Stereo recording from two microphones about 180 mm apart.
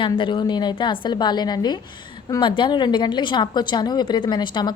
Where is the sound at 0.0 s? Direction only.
25° left (ahead or behind).